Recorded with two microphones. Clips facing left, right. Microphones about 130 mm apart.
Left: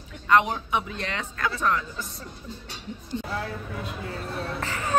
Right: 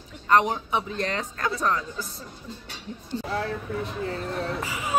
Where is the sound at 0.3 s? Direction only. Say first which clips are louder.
Even; 35° right (ahead or behind).